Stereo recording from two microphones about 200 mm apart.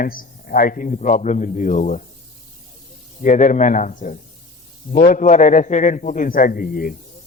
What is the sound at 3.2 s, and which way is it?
A man's voice, 40° left (ahead or behind).